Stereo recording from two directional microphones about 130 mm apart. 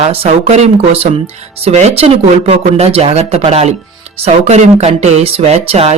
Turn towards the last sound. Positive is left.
turn(degrees=-50)  # may be behind; listen again after turning